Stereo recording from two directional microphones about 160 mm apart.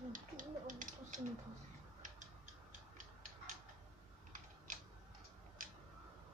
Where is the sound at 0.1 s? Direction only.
55° right (ahead or behind).